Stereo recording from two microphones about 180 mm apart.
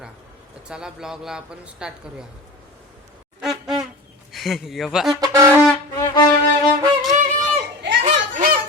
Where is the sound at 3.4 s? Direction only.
Centre (ahead or behind).